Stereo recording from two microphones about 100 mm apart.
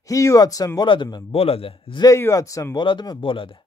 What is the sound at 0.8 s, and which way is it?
Speech, 55° left (ahead or behind).